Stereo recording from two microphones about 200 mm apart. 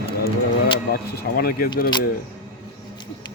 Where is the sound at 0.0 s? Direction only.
30° left (ahead or behind).